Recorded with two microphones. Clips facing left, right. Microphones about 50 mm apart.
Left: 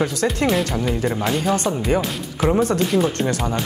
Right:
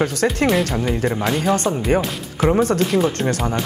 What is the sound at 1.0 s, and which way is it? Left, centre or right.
Speech, centre.